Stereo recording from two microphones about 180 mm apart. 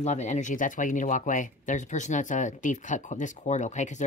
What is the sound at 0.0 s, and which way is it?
Speech, 40° left (ahead or behind).